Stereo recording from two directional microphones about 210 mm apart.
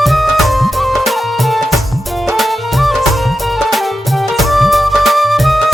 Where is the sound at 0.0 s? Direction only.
Centre (ahead or behind).